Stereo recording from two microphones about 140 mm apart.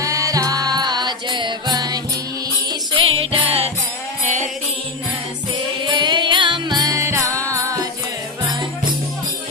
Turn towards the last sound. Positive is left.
turn(degrees=-20)  # may be behind; listen again after turning